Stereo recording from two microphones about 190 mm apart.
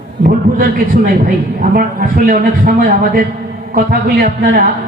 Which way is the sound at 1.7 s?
50° right (ahead or behind).